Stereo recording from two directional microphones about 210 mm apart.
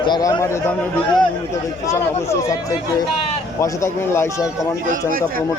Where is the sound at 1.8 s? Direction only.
15° left (ahead or behind).